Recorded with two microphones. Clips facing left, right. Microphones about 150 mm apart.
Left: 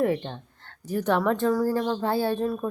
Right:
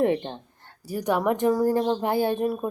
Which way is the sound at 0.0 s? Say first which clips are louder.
Right 2 dB; 25° right (ahead or behind).